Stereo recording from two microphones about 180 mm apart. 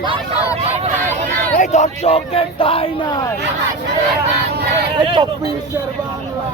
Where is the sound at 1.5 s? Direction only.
40° left (ahead or behind).